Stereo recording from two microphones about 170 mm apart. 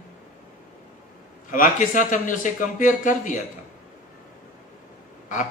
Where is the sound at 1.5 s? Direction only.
50° left (ahead or behind).